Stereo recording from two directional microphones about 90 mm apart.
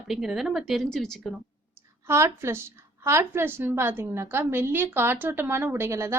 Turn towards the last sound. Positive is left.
turn(degrees=-30)  # may be behind; listen again after turning